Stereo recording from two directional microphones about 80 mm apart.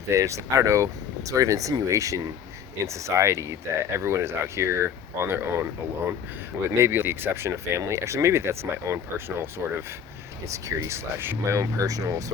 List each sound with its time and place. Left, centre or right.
0.1 s speech: right
6.7 s speech: right
10.5 s speech: right